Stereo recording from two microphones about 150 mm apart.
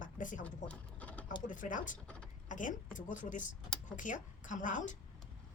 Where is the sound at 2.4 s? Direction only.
60° left (ahead or behind).